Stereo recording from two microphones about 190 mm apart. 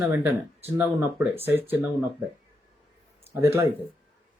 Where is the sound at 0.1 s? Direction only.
10° right (ahead or behind).